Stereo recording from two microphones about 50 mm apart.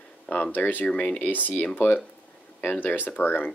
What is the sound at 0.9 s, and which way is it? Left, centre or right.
Speech, left.